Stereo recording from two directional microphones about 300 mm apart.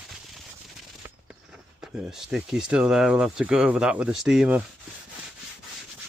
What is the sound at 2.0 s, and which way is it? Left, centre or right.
Speech, centre.